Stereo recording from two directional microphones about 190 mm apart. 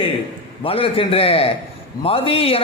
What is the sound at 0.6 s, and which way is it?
A man's voice, 30° left (ahead or behind).